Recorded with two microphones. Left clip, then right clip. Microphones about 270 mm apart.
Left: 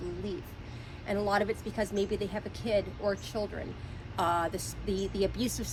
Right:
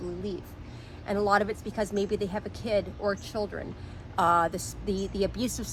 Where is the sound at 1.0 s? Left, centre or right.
Centre.